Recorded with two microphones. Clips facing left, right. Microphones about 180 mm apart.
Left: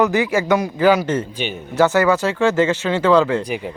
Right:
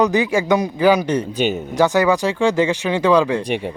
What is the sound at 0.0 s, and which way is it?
A man's voice, 15° right (ahead or behind).